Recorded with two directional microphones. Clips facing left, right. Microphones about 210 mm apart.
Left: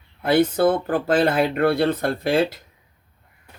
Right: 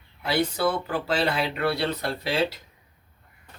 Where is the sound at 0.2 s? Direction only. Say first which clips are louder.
Left 7 dB; 50° left (ahead or behind).